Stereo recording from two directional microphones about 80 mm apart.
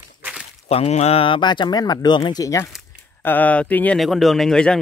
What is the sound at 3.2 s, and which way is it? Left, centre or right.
Speech, left.